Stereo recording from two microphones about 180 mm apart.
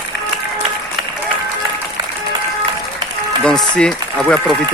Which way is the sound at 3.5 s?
5° left (ahead or behind).